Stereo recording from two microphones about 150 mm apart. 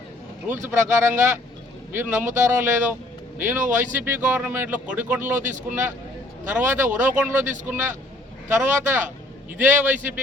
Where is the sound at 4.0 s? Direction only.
10° right (ahead or behind).